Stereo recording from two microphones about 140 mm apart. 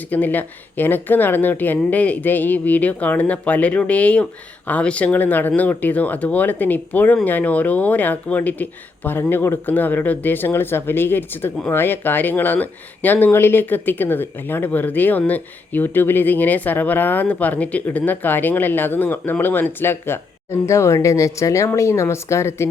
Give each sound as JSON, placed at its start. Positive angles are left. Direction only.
{"t": 0.1, "sound": "speech", "side_deg": 10}